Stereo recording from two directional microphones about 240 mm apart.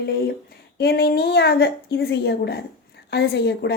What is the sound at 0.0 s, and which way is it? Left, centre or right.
A woman's voice, left.